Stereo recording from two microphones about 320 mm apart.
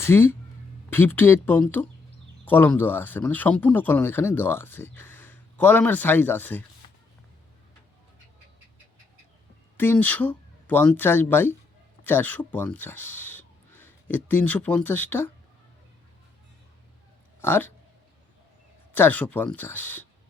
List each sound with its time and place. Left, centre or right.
0.0 s speech: centre
9.7 s speech: centre
17.4 s speech: centre
18.9 s speech: centre